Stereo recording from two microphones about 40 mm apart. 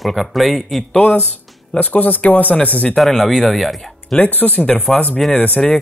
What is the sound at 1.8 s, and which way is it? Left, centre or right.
Speech, left.